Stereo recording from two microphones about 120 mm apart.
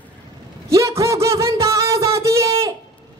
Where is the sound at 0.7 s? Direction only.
25° right (ahead or behind).